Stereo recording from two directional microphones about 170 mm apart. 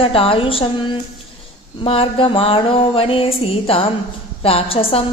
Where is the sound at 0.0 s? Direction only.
35° left (ahead or behind).